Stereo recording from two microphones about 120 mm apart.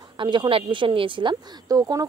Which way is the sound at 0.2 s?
40° right (ahead or behind).